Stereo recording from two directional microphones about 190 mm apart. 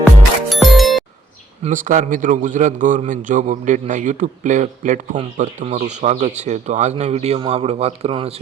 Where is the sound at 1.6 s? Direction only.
45° right (ahead or behind).